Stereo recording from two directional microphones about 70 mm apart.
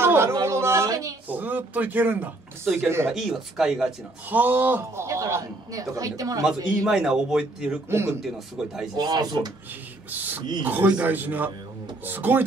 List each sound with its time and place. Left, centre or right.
0.0 s speech: right
0.8 s a man's voice: right
1.3 s speech: right
3.2 s speech: centre
4.3 s speech: right
4.9 s speech: right
5.4 s a man's voice: right
6.9 s speech: centre
7.9 s speech: right
8.2 s speech: centre
8.9 s speech: right
10.1 s speech: right